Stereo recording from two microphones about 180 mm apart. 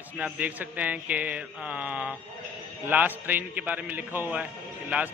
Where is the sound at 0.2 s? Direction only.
10° right (ahead or behind).